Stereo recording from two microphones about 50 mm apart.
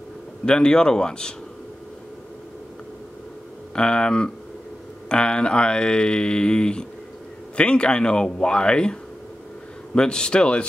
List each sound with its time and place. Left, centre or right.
0.5 s speech: centre
3.7 s speech: centre
9.9 s speech: centre